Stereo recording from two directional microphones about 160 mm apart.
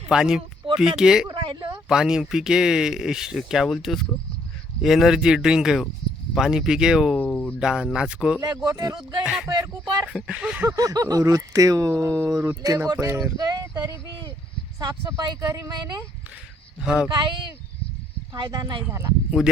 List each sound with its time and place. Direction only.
0.1 s speech: 5° right (ahead or behind)
1.3 s a sound: 30° right (ahead or behind)
1.9 s speech: 5° right (ahead or behind)
7.2 s speech: 10° left (ahead or behind)
7.6 s speech: 5° right (ahead or behind)
8.4 s speech: 25° right (ahead or behind)
9.2 s speech: 5° right (ahead or behind)
9.5 s speech: 25° right (ahead or behind)
10.1 s speech: 5° right (ahead or behind); by 16.0 s 25° right (ahead or behind)
16.8 s speech: 5° right (ahead or behind)
18.3 s speech: 25° right (ahead or behind)
18.9 s speech: 15° right (ahead or behind)
19.4 s speech: centre (ahead or behind)